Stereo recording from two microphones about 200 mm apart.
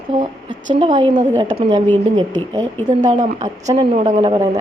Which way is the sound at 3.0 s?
40° right (ahead or behind).